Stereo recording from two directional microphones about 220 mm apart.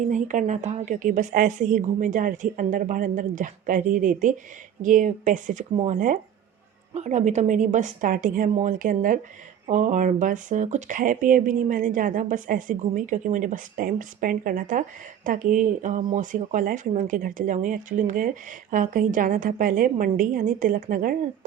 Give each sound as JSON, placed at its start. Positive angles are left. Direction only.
{"t": 0.1, "sound": "speech", "side_deg": -35}